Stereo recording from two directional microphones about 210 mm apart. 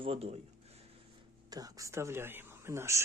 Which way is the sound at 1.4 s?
15° right (ahead or behind).